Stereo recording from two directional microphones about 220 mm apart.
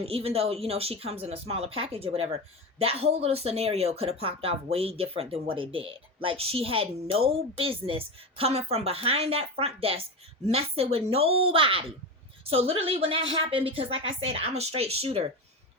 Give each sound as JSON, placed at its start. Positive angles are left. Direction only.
{"t": 0.0, "sound": "a woman's voice", "side_deg": -25}